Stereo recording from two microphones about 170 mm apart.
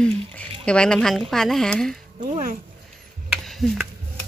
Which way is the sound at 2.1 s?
50° right (ahead or behind).